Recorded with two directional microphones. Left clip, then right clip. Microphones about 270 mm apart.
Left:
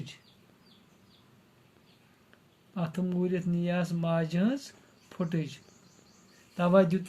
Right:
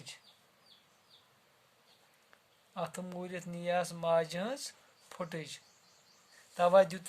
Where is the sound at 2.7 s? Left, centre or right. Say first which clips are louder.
Left 4 dB; right.